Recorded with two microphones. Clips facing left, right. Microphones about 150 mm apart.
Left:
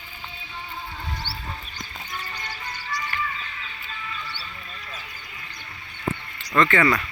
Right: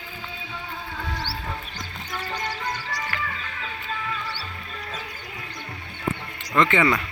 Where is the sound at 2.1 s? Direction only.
75° right (ahead or behind).